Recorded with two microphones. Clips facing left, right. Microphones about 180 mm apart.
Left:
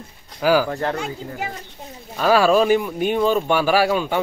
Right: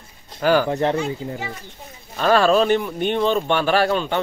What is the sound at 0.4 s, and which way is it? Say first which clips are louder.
Speech: even; 5° left (ahead or behind).